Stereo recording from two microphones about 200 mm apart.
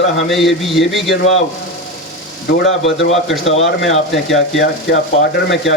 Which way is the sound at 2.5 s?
65° left (ahead or behind).